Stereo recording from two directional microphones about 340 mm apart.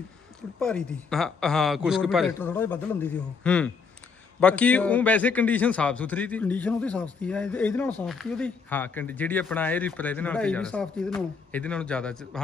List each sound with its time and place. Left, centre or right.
0.6 s speech: centre